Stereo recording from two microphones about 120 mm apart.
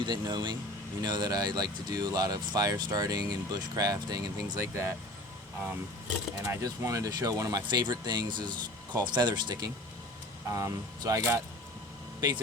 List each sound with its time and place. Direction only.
0.0 s speech: 40° right (ahead or behind)
6.4 s speech: 25° right (ahead or behind)